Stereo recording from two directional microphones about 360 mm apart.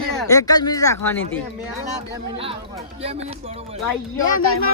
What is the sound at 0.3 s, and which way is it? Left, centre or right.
Speech, centre.